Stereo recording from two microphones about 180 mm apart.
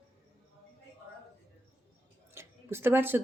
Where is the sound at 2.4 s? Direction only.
15° right (ahead or behind).